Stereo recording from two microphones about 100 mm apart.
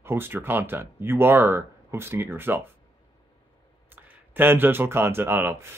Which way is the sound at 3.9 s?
20° right (ahead or behind).